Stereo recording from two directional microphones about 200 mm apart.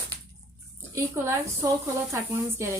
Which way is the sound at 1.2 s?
10° right (ahead or behind).